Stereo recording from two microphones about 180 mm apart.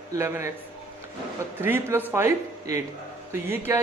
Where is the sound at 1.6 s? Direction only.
10° right (ahead or behind).